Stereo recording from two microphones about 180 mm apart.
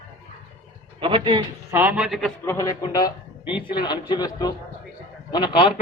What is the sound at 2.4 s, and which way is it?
Speech, 20° left (ahead or behind).